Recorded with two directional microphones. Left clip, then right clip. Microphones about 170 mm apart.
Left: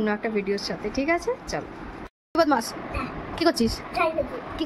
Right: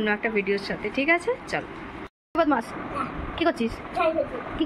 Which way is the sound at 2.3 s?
40° left (ahead or behind).